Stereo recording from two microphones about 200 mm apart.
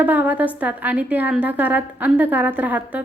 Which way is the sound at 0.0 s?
10° right (ahead or behind).